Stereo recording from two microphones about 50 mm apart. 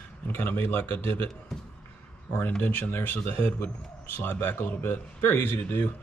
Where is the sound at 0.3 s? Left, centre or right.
Left.